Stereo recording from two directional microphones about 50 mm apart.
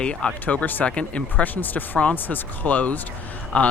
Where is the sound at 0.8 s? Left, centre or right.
Left.